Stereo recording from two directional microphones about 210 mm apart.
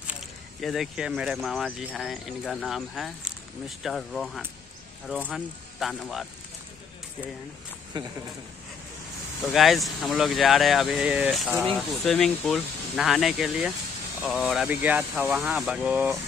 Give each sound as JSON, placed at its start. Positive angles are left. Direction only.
{"t": 0.6, "sound": "speech", "side_deg": 0}
{"t": 7.9, "sound": "speech", "side_deg": -20}
{"t": 9.5, "sound": "speech", "side_deg": 0}